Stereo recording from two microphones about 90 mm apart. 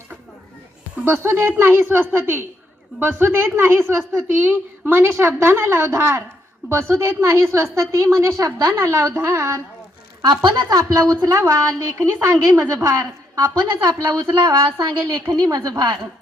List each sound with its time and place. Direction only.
1.0 s a woman's voice: 25° right (ahead or behind)
10.2 s a woman's voice: 55° right (ahead or behind)
11.3 s a woman's voice: 35° right (ahead or behind)